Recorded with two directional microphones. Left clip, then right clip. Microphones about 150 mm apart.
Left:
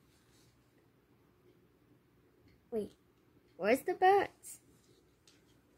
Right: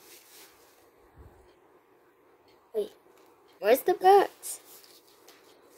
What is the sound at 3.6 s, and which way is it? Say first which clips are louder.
Speech: right 7 dB; 10° right (ahead or behind).